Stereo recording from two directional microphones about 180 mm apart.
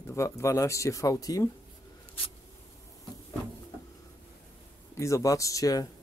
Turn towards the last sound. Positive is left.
turn(degrees=20)  # may be behind; listen again after turning